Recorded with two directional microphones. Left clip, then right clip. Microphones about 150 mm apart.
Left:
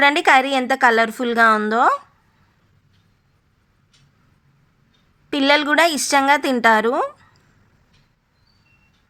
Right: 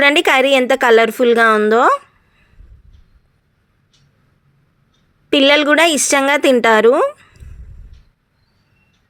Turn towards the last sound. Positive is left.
turn(degrees=-15)  # may be behind; listen again after turning